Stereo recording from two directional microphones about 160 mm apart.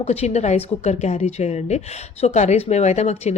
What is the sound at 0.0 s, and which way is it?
Speech, 40° left (ahead or behind).